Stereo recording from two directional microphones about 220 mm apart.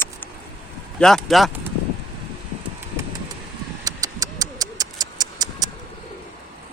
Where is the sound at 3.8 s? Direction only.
15° right (ahead or behind).